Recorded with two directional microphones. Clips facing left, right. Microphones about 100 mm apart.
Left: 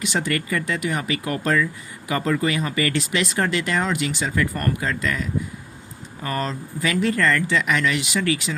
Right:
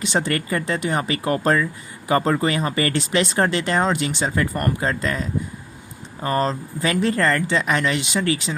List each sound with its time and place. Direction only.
0.0 s speech: 30° right (ahead or behind)